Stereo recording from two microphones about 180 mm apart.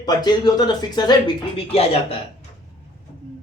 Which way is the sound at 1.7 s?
35° left (ahead or behind).